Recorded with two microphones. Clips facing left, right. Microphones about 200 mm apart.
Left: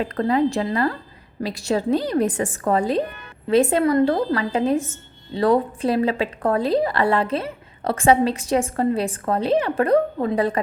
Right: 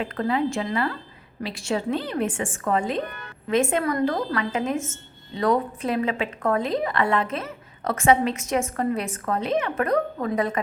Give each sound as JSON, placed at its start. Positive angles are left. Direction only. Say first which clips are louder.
{"t": 0.0, "sound": "a woman's voice", "louder": "left 4 dB", "side_deg": 40}